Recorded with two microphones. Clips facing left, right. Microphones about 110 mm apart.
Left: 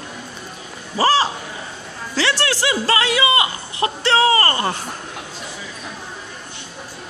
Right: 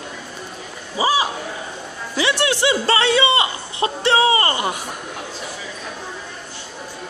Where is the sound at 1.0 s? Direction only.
10° right (ahead or behind).